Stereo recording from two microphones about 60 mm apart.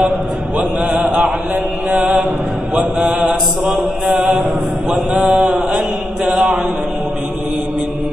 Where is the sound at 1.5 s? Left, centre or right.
Right.